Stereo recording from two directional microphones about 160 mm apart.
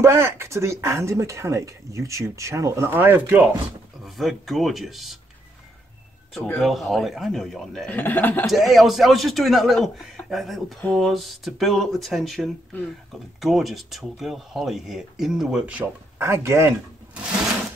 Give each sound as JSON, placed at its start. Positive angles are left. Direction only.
{"t": 0.0, "sound": "speech", "side_deg": -15}
{"t": 4.0, "sound": "a man's voice", "side_deg": 0}
{"t": 6.6, "sound": "a man's voice", "side_deg": 0}
{"t": 8.5, "sound": "a man's voice", "side_deg": 0}